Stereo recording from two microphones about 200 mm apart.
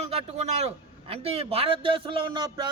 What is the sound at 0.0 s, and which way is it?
A man's voice, 30° right (ahead or behind).